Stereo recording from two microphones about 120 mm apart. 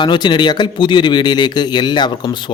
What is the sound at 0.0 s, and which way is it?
Speech, 40° left (ahead or behind).